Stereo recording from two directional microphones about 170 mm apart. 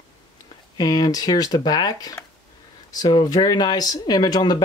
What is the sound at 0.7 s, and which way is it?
Speech, 25° left (ahead or behind).